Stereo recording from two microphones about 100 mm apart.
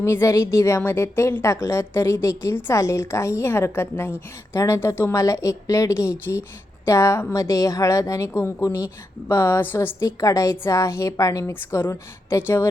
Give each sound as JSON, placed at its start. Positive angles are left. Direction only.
{"t": 0.0, "sound": "a woman's voice", "side_deg": 25}